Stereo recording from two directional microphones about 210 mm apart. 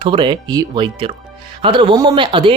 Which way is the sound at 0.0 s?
25° right (ahead or behind).